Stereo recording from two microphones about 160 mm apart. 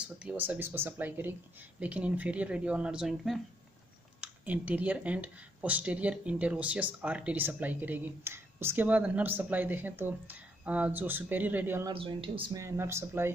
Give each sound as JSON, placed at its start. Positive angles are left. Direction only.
{"t": 0.0, "sound": "speech", "side_deg": -10}
{"t": 11.9, "sound": "speech", "side_deg": -35}
{"t": 12.5, "sound": "speech", "side_deg": -15}